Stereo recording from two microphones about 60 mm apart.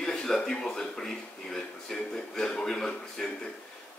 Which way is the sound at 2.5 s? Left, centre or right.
Centre.